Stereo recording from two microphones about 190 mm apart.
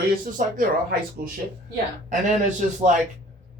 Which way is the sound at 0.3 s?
45° right (ahead or behind).